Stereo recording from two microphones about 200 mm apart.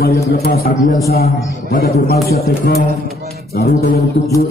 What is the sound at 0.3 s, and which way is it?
A man's voice, 50° left (ahead or behind).